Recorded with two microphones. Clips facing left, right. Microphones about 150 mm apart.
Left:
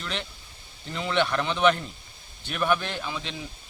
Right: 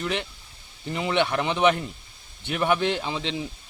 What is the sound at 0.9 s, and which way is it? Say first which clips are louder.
Speech: right 2 dB; 15° right (ahead or behind).